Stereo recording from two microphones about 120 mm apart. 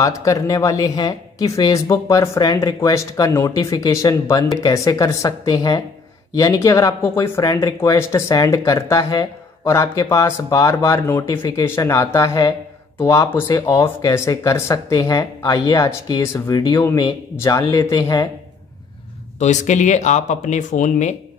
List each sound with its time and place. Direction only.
0.0 s speech: 25° left (ahead or behind)
19.4 s speech: 85° left